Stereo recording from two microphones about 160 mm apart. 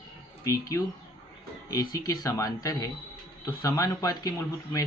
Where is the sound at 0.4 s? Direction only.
20° left (ahead or behind).